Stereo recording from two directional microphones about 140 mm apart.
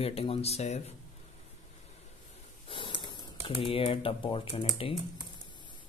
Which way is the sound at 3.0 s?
35° left (ahead or behind).